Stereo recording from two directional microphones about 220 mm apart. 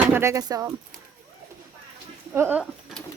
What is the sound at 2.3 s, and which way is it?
Speech, 10° right (ahead or behind).